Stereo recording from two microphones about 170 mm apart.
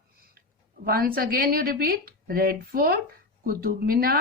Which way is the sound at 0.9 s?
60° right (ahead or behind).